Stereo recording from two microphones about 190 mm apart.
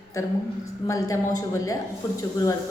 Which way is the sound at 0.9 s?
20° left (ahead or behind).